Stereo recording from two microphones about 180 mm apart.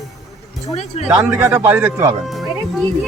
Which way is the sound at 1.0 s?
10° right (ahead or behind).